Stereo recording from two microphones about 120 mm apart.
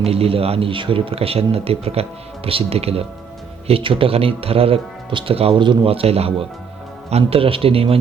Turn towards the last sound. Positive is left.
turn(degrees=-55)  # may be behind; listen again after turning